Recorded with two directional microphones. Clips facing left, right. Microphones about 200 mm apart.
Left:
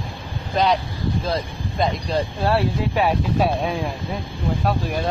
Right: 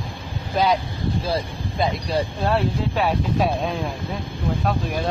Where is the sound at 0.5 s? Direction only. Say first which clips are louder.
Left 1 dB; centre (ahead or behind).